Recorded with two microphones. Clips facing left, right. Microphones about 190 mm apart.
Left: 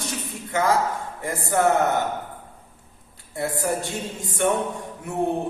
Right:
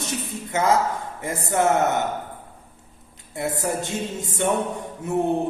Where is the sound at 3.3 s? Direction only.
20° right (ahead or behind).